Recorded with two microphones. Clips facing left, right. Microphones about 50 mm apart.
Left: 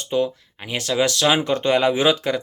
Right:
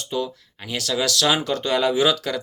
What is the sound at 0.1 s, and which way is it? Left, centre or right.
Speech, left.